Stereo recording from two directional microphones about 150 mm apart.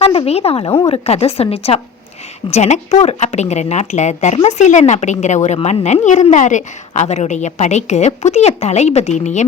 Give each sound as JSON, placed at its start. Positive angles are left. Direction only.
{"t": 0.0, "sound": "a woman's voice", "side_deg": 40}